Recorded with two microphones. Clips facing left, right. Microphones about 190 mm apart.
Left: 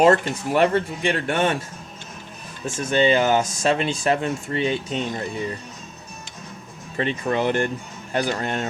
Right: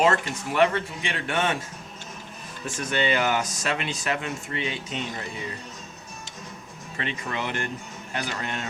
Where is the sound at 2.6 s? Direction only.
25° left (ahead or behind).